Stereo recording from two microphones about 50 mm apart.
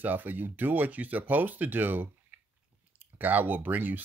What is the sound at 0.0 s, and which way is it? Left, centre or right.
Speech, right.